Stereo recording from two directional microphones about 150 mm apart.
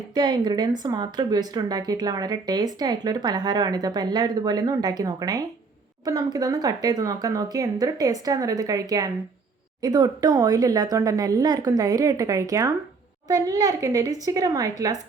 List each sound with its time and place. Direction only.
0.1 s a woman's voice: 30° right (ahead or behind)